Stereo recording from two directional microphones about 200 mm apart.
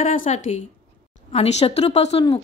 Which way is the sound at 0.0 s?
40° left (ahead or behind).